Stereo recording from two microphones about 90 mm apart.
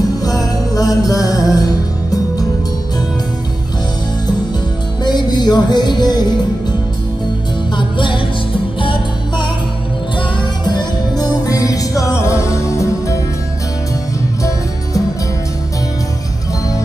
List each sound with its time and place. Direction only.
0.2 s music: 45° left (ahead or behind)
5.0 s music: 50° left (ahead or behind)
7.7 s music: 65° left (ahead or behind)
10.6 s music: 50° left (ahead or behind); by 13.2 s 35° left (ahead or behind)